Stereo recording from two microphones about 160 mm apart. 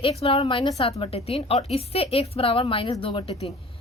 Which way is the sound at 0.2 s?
35° left (ahead or behind).